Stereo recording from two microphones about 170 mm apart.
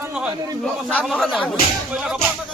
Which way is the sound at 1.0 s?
Centre (ahead or behind).